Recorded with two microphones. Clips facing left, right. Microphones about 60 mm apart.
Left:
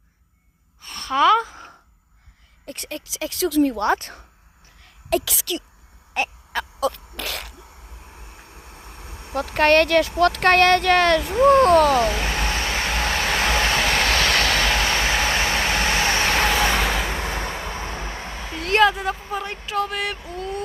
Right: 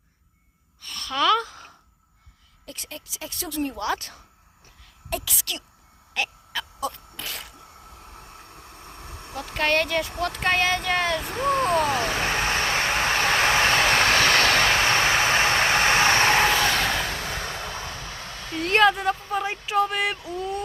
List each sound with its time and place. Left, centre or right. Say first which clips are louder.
0.8 s sigh: left 6 dB; left
2.7 s speech: left 8 dB; left
5.0 s a woman's voice: left 8 dB; left
6.1 s a sound: left 4 dB; left
6.7 s sneeze: left 7 dB; left
8.1 s vehicle: even; centre
9.3 s speech: left 7 dB; left
11.9 s vehicle: left 3 dB; right
13.8 s train: right 1 dB; centre
14.2 s train: right 1 dB; right
14.7 s vehicle: right 1 dB; right
16.4 s vehicle: left 1 dB; centre
17.1 s vehicle: left 4 dB; left
18.6 s a sound: left 1 dB; centre